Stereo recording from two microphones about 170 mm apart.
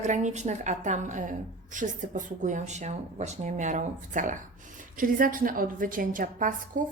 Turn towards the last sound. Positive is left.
turn(degrees=-50)  # may be behind; listen again after turning